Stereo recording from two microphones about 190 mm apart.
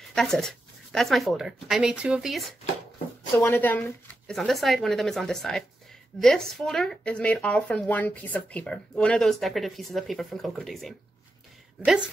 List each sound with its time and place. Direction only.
0.1 s speech: centre (ahead or behind)
3.3 s speech: 10° left (ahead or behind)